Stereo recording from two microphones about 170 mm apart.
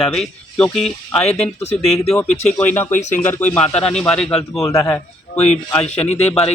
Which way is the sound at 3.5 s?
5° left (ahead or behind).